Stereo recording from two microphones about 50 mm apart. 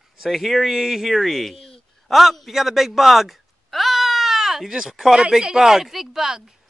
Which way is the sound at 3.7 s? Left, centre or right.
Centre.